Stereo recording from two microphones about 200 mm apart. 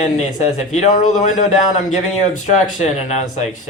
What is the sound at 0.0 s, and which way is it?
Speech, 35° left (ahead or behind).